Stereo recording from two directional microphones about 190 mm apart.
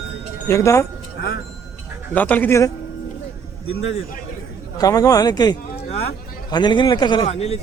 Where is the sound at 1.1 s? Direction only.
60° left (ahead or behind).